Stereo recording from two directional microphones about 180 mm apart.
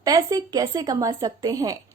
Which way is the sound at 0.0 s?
20° right (ahead or behind).